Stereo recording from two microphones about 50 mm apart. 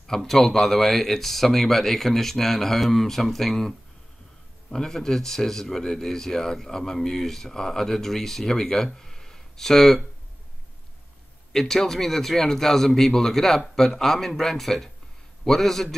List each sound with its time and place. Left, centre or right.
0.0 s speech: centre
11.5 s speech: centre